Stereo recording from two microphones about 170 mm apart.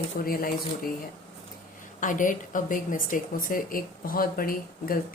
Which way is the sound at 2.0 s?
50° left (ahead or behind).